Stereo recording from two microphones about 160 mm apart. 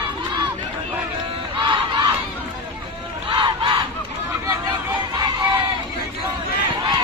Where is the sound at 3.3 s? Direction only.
30° right (ahead or behind).